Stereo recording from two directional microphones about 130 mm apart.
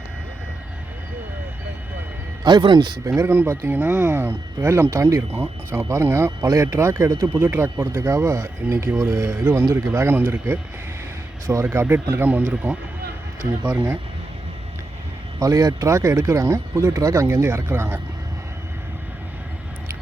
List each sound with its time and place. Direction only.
2.4 s speech: 35° right (ahead or behind)
3.2 s speech: 20° right (ahead or behind)
15.4 s speech: 25° right (ahead or behind)